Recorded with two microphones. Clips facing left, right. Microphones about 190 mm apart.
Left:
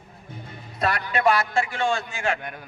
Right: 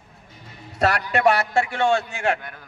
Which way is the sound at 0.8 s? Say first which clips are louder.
Right 4 dB; 75° right (ahead or behind).